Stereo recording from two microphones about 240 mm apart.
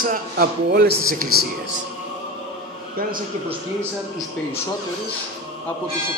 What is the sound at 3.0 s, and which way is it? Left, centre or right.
Speech, right.